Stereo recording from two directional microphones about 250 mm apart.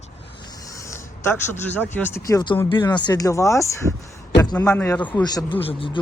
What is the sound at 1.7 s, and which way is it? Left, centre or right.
Speech, centre.